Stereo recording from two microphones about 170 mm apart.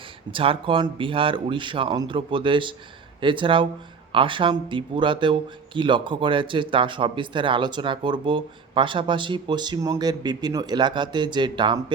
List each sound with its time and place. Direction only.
0.3 s speech: 30° right (ahead or behind)